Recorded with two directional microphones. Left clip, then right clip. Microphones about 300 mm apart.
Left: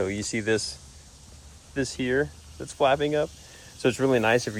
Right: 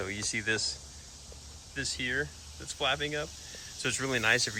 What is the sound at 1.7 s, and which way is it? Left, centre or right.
Speech, centre.